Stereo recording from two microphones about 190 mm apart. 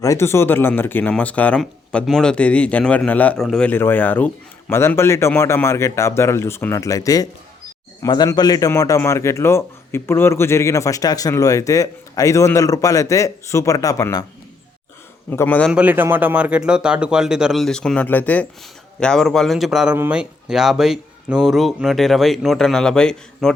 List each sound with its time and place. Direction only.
0.0 s a man's voice: 15° left (ahead or behind)
15.3 s a man's voice: 10° left (ahead or behind)
15.7 s a man's voice: 10° right (ahead or behind)